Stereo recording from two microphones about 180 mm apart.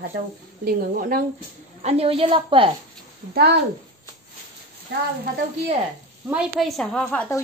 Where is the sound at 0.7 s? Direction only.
55° right (ahead or behind).